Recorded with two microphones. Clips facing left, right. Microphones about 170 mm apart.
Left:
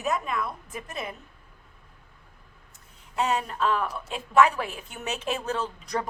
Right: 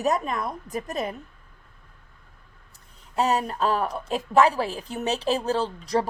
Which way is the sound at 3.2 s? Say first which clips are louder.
Right 3 dB; 40° right (ahead or behind).